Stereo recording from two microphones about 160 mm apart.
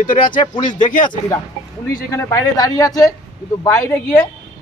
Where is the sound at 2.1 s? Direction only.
20° left (ahead or behind).